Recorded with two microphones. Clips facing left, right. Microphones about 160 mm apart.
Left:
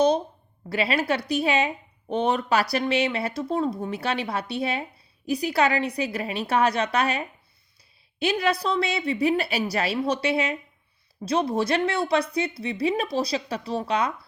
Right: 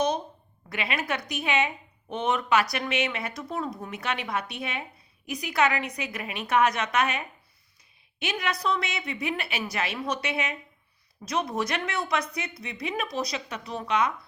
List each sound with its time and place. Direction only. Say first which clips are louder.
0.7 s speech: left 6 dB; 35° left (ahead or behind)